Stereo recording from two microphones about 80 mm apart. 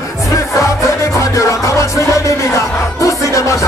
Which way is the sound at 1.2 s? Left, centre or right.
Left.